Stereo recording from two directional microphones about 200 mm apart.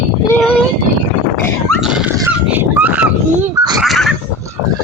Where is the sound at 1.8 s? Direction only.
5° right (ahead or behind).